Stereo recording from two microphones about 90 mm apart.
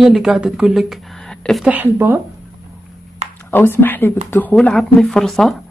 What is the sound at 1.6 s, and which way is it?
Speech, 20° right (ahead or behind).